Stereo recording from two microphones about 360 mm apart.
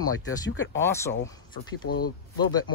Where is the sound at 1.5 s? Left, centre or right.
Left.